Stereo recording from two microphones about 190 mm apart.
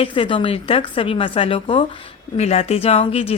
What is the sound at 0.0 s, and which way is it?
Speech, 25° left (ahead or behind).